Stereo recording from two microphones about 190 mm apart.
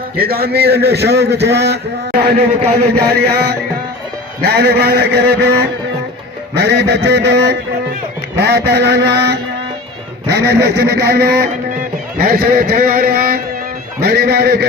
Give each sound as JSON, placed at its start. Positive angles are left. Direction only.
{"t": 0.2, "sound": "a man's voice", "side_deg": -55}